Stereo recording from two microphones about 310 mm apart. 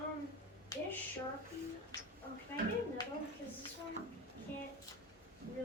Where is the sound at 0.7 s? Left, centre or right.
Centre.